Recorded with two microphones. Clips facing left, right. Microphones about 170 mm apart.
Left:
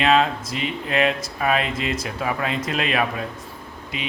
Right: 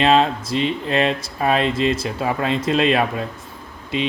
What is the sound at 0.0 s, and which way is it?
Speech, 30° right (ahead or behind).